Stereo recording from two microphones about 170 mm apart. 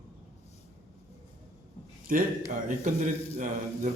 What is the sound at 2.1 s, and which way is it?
Speech, 55° right (ahead or behind).